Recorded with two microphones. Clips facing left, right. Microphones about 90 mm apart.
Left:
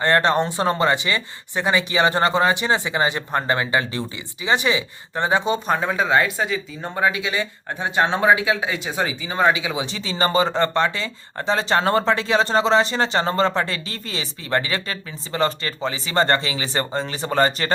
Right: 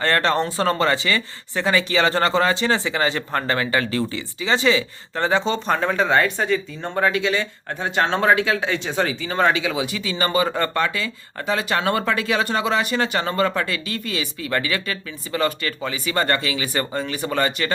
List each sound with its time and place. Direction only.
0.0 s speech: 20° left (ahead or behind); by 17.7 s 35° left (ahead or behind)